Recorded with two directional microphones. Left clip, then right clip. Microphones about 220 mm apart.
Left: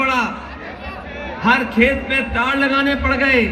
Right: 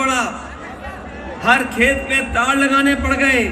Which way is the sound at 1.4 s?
50° right (ahead or behind).